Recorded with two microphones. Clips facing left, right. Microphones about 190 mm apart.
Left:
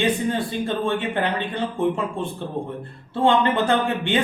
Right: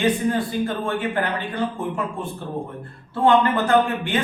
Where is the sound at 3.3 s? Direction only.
25° left (ahead or behind).